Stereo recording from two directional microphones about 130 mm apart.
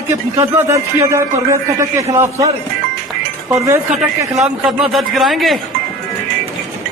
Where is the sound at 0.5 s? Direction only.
20° right (ahead or behind).